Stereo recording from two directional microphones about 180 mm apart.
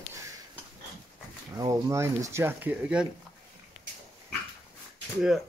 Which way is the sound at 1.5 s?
20° right (ahead or behind).